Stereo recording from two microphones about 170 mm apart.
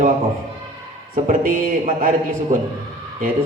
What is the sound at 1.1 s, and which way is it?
Music, 55° right (ahead or behind).